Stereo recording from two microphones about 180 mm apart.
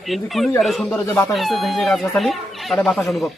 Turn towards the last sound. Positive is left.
turn(degrees=0)  # may be behind; listen again after turning